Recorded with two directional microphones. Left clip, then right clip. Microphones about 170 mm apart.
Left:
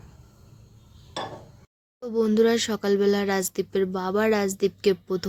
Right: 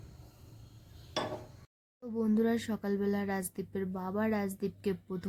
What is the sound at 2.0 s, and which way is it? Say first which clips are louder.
Speech: left 11 dB; 15° left (ahead or behind).